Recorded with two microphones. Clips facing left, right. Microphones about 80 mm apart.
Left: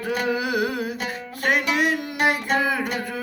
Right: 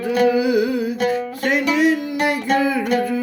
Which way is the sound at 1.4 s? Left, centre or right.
Left.